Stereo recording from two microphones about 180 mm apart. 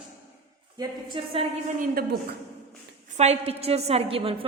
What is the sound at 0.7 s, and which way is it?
Speech, 25° right (ahead or behind).